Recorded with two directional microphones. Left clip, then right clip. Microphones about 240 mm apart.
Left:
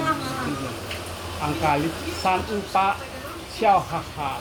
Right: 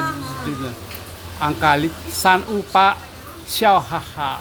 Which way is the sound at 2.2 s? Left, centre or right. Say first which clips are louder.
Right 8 dB; right.